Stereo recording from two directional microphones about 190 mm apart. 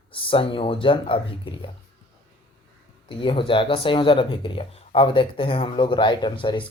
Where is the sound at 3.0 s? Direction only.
25° left (ahead or behind).